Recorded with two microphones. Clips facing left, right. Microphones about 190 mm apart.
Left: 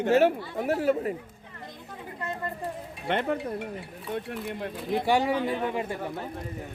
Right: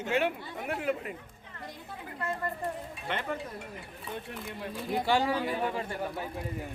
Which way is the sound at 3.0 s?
55° left (ahead or behind).